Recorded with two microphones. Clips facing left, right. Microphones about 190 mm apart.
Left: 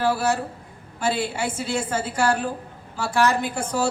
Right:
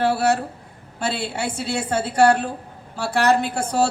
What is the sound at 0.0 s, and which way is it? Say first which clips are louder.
Speech: right 3 dB; 65° right (ahead or behind).